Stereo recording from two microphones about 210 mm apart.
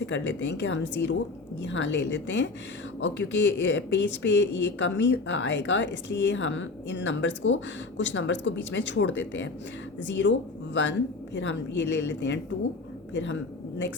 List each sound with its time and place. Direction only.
0.0 s speech: 60° left (ahead or behind)
11.3 s a woman's voice: 60° left (ahead or behind)